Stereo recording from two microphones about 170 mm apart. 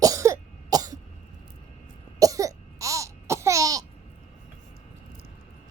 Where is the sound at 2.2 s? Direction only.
20° right (ahead or behind).